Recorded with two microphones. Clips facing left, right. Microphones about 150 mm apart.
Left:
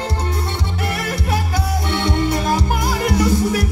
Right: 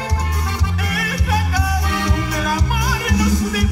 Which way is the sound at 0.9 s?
30° left (ahead or behind).